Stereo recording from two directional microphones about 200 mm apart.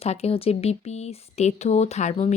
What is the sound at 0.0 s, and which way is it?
Speech, 30° left (ahead or behind).